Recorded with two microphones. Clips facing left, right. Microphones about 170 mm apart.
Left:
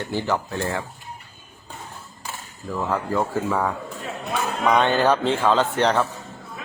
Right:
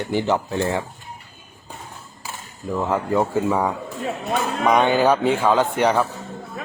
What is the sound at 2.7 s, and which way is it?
Speech, 20° right (ahead or behind).